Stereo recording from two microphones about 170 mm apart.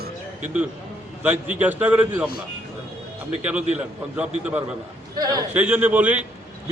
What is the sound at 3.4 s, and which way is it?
A man's voice, 10° right (ahead or behind).